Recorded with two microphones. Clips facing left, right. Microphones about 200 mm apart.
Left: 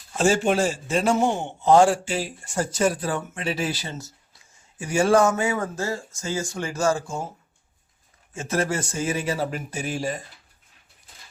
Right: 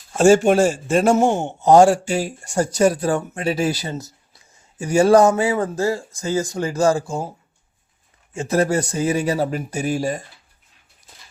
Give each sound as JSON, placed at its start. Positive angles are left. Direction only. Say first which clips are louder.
{"t": 0.1, "sound": "a man's voice", "louder": "right 7 dB", "side_deg": -45}
{"t": 8.4, "sound": "speech", "louder": "right 6 dB", "side_deg": -35}